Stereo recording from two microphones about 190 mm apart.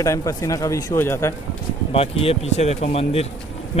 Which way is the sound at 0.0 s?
15° left (ahead or behind).